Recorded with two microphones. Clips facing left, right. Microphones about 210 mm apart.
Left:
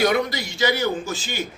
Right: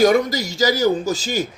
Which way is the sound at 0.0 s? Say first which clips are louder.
Right 5 dB; 45° right (ahead or behind).